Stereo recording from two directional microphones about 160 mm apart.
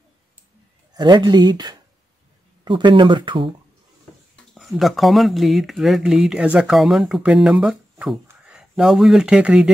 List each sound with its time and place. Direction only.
0.9 s speech: 25° right (ahead or behind)
4.6 s speech: centre (ahead or behind)